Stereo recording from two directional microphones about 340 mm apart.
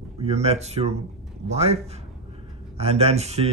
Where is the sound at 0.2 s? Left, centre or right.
Centre.